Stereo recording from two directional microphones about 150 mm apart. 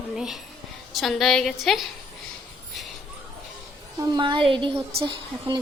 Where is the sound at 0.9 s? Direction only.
Centre (ahead or behind).